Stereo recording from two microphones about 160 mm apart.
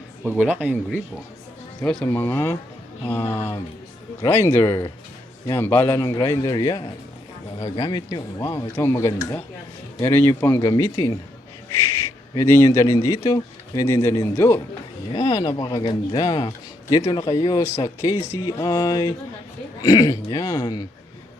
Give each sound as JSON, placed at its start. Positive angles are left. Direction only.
{"t": 0.3, "sound": "speech", "side_deg": -10}
{"t": 1.8, "sound": "speech", "side_deg": 5}
{"t": 8.4, "sound": "speech", "side_deg": 15}
{"t": 12.3, "sound": "speech", "side_deg": 20}
{"t": 15.1, "sound": "speech", "side_deg": 35}